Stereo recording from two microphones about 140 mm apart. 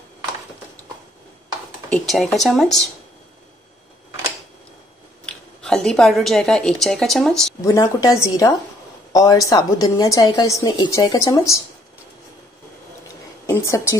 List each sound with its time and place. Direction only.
1.9 s speech: 5° left (ahead or behind)
5.2 s speech: 5° left (ahead or behind)
7.6 s a woman's voice: 25° left (ahead or behind)
13.5 s a woman's voice: 20° left (ahead or behind)